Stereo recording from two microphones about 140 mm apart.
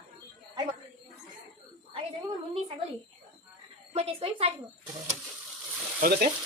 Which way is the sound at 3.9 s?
45° right (ahead or behind).